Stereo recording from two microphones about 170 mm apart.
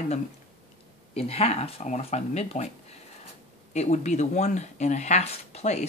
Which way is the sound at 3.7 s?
45° left (ahead or behind).